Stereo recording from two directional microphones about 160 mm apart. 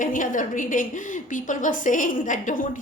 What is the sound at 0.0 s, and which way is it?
A woman's voice, 55° left (ahead or behind).